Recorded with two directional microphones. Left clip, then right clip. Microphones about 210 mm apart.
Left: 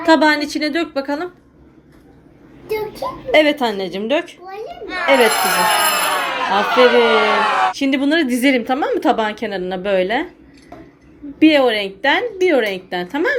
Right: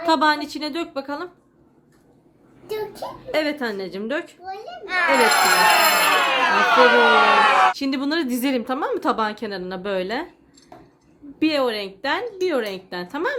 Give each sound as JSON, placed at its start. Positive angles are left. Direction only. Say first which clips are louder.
{"t": 0.0, "sound": "a woman's voice", "louder": "left 5 dB", "side_deg": -15}
{"t": 3.3, "sound": "a woman's voice", "louder": "left 10 dB", "side_deg": -10}
{"t": 4.9, "sound": "speech", "louder": "left 3 dB", "side_deg": 5}
{"t": 7.8, "sound": "a woman's voice", "louder": "left 7 dB", "side_deg": -20}
{"t": 11.3, "sound": "a woman's voice", "louder": "left 8 dB", "side_deg": -20}